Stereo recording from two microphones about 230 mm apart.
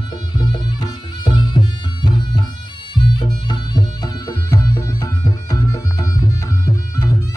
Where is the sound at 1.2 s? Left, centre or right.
Centre.